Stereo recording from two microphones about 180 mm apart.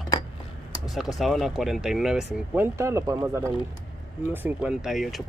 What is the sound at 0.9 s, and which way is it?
Speech, centre (ahead or behind).